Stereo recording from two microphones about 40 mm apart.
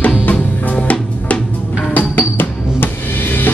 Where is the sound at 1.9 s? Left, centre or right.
Left.